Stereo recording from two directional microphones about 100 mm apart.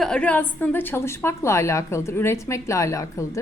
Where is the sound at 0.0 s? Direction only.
10° left (ahead or behind).